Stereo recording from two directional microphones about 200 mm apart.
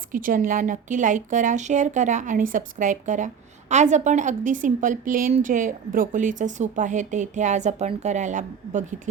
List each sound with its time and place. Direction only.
0.1 s a woman's voice: 40° right (ahead or behind)